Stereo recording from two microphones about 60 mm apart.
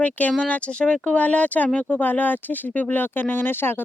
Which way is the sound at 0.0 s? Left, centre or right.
Left.